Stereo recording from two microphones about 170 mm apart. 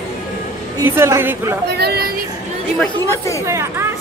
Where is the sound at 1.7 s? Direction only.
70° right (ahead or behind).